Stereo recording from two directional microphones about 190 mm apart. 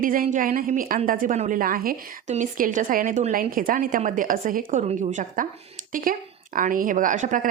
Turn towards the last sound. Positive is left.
turn(degrees=-40)  # may be behind; listen again after turning